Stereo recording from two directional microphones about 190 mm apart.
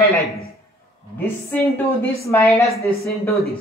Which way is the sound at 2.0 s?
15° left (ahead or behind).